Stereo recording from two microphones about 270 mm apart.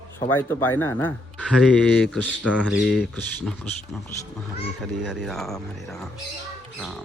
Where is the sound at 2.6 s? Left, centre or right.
Left.